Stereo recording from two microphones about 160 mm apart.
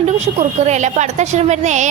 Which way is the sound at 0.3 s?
45° right (ahead or behind).